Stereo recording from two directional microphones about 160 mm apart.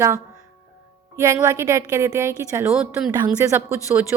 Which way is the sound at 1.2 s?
15° right (ahead or behind).